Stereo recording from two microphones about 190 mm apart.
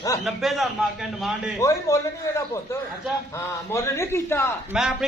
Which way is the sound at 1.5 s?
15° left (ahead or behind).